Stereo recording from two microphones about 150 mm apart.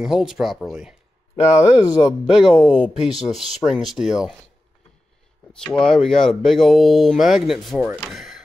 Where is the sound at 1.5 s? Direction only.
25° left (ahead or behind).